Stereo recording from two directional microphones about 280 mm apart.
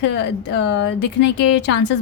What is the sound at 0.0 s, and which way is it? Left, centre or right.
A woman's voice, left.